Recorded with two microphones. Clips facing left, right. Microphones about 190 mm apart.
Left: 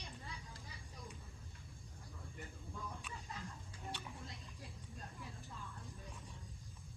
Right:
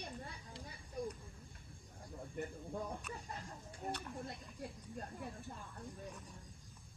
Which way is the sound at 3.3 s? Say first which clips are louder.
Right 2 dB; 45° right (ahead or behind).